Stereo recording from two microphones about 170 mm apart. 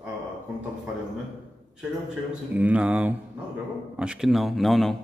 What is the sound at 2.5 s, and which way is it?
A man's voice, 10° right (ahead or behind).